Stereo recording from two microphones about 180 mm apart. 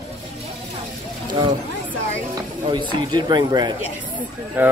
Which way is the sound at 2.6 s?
25° right (ahead or behind).